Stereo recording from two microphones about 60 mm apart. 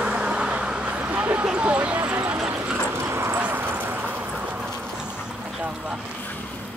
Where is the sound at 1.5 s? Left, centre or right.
Centre.